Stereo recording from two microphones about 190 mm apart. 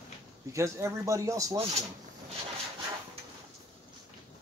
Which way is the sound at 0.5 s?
15° right (ahead or behind).